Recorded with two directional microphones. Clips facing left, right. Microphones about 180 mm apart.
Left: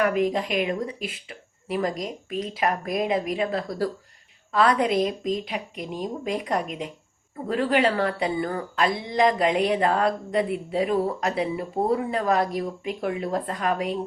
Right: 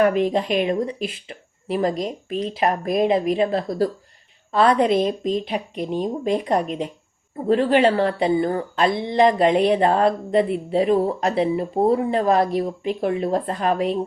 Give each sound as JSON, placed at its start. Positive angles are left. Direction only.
{"t": 0.0, "sound": "a woman's voice", "side_deg": -30}